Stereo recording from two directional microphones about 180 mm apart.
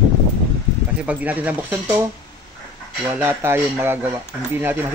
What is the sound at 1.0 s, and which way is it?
Speech, 10° right (ahead or behind).